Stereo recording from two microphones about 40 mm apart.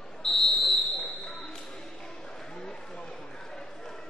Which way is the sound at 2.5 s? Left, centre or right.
Centre.